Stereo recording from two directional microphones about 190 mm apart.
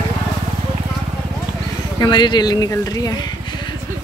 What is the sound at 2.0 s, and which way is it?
Speech, 25° left (ahead or behind).